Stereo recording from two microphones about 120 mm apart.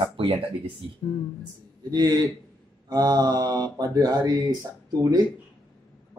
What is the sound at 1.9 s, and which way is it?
Speech, 35° right (ahead or behind).